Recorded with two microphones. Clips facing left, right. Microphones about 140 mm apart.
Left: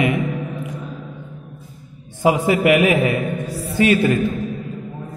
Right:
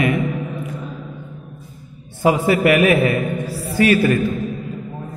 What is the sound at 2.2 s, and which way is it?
A man's voice, 15° left (ahead or behind).